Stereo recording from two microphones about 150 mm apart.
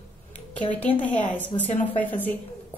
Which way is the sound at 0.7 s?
10° left (ahead or behind).